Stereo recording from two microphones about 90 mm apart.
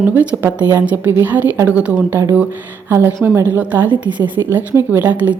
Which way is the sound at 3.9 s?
60° right (ahead or behind).